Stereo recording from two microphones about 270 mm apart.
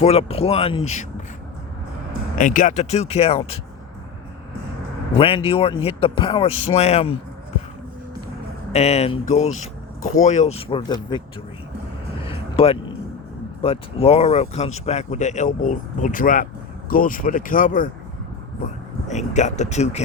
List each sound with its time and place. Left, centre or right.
0.0 s speech: left
2.4 s speech: left
5.1 s speech: centre
8.7 s speech: left
12.2 s a sound: left
13.6 s speech: left
19.0 s speech: left